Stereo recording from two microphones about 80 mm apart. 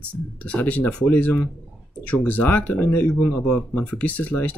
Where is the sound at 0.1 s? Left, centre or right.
Centre.